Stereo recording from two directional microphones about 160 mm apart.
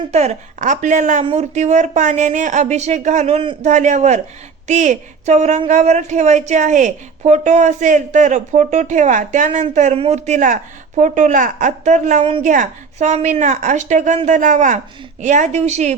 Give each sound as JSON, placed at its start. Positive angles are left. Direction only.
{"t": 0.1, "sound": "speech", "side_deg": -45}
{"t": 3.7, "sound": "speech", "side_deg": -50}
{"t": 12.4, "sound": "speech", "side_deg": -50}